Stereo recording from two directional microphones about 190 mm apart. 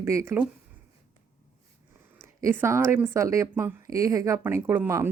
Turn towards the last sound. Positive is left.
turn(degrees=-15)  # may be behind; listen again after turning